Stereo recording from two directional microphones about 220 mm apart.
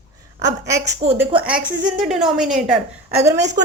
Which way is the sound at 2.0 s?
Centre (ahead or behind).